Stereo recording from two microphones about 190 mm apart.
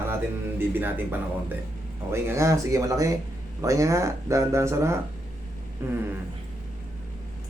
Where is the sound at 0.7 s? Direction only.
10° right (ahead or behind).